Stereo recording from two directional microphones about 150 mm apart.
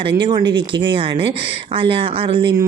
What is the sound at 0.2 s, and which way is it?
Speech, 30° right (ahead or behind).